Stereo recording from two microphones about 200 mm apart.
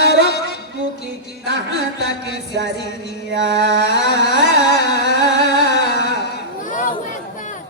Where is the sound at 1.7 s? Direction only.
55° left (ahead or behind).